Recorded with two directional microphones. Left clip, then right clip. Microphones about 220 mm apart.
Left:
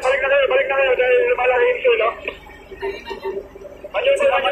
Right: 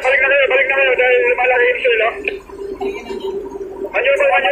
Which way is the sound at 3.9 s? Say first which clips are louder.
Right 3 dB; 25° right (ahead or behind).